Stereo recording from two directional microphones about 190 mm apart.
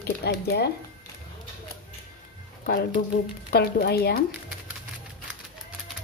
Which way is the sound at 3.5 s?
55° left (ahead or behind).